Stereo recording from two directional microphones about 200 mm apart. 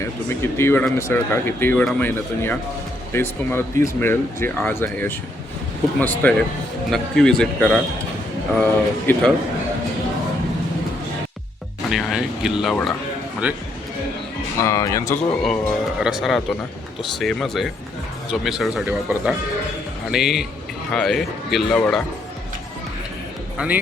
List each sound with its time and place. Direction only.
0.0 s speech: 15° left (ahead or behind)
11.9 s speech: centre (ahead or behind)
14.6 s speech: 15° left (ahead or behind)
15.4 s speech: centre (ahead or behind)
23.6 s speech: 10° right (ahead or behind)